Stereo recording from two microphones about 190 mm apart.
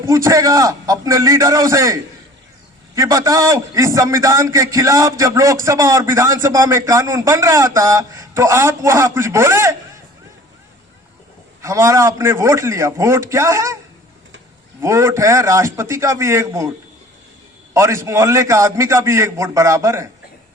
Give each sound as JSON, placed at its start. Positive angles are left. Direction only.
{"t": 0.0, "sound": "a man's voice", "side_deg": -15}
{"t": 11.6, "sound": "a man's voice", "side_deg": -15}
{"t": 14.8, "sound": "a man's voice", "side_deg": -15}
{"t": 17.7, "sound": "a man's voice", "side_deg": -15}